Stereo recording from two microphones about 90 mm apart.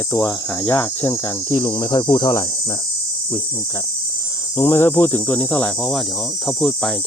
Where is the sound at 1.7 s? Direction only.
50° left (ahead or behind).